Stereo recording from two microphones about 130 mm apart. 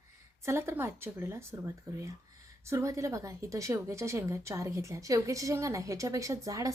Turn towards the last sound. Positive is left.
turn(degrees=-25)  # may be behind; listen again after turning